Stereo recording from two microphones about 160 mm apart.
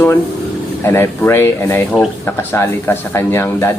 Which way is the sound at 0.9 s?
15° left (ahead or behind).